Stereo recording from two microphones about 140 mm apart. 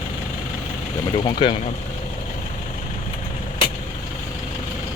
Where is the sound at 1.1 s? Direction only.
35° left (ahead or behind).